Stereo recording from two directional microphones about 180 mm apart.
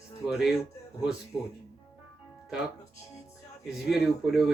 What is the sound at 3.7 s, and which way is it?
Speech, centre (ahead or behind).